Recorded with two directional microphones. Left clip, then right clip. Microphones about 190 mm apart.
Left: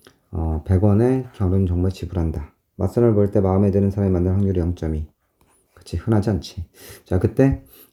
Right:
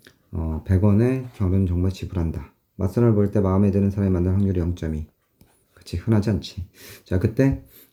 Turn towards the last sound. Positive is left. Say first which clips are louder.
# left 3 dB
turn(degrees=20)  # may be behind; listen again after turning